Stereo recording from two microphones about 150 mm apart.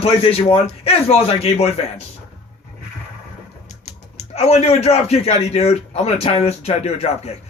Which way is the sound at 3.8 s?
45° left (ahead or behind).